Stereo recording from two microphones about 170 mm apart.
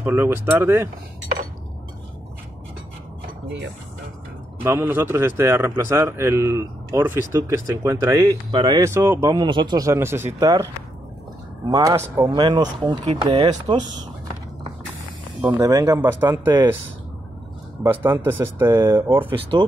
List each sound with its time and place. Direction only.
0.0 s speech: 15° right (ahead or behind)
4.6 s speech: 15° right (ahead or behind)
11.7 s speech: 20° right (ahead or behind)
15.4 s speech: 20° right (ahead or behind)
17.8 s speech: 10° right (ahead or behind)